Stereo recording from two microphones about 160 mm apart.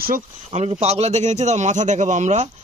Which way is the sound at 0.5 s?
40° right (ahead or behind).